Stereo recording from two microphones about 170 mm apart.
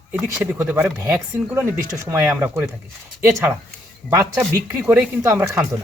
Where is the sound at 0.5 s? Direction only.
15° right (ahead or behind).